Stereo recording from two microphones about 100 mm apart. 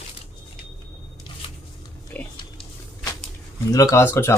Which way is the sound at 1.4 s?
70° left (ahead or behind).